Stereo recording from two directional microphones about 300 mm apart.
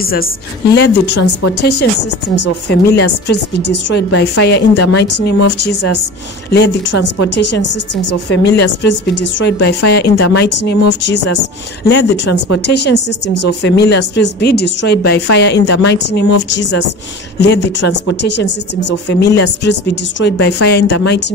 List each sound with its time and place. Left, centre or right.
0.0 s a woman's voice: left